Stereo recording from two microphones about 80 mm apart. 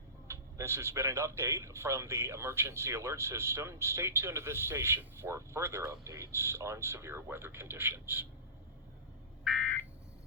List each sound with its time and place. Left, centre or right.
0.3 s speech: right
9.4 s frog: centre